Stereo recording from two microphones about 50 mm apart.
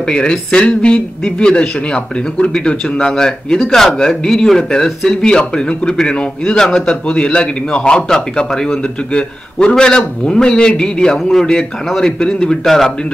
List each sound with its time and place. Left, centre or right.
0.0 s a man's voice: centre